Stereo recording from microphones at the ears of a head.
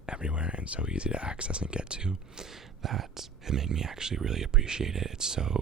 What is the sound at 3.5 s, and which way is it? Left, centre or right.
Speech, right.